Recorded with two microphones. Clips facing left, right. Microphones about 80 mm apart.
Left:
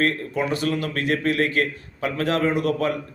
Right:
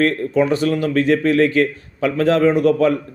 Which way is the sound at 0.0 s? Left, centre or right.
Right.